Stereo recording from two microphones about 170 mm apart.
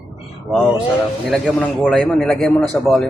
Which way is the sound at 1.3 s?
5° left (ahead or behind).